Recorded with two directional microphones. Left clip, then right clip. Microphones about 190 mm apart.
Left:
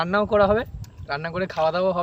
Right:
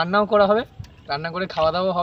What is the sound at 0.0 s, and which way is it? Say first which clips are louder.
Speech: right 2 dB; 10° left (ahead or behind).